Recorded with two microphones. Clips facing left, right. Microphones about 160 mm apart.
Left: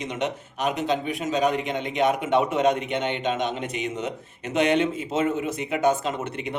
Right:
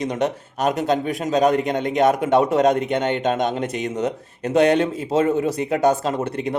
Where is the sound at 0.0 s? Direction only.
40° right (ahead or behind).